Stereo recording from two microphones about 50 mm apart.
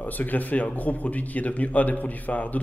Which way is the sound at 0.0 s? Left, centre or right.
Left.